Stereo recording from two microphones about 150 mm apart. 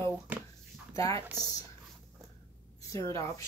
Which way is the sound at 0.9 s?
20° left (ahead or behind).